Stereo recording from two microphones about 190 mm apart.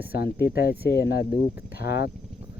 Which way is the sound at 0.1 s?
55° left (ahead or behind).